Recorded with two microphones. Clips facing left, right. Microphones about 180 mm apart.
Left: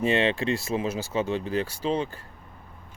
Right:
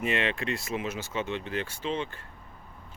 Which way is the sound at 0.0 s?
30° left (ahead or behind).